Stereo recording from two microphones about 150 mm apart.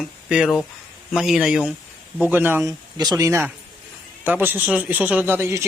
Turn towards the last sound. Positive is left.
turn(degrees=-15)  # may be behind; listen again after turning